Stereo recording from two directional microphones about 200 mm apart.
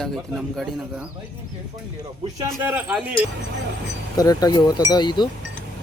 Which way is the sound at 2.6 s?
5° right (ahead or behind).